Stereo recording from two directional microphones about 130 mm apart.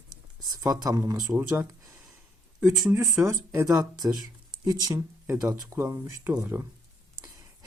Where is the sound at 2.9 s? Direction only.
20° right (ahead or behind).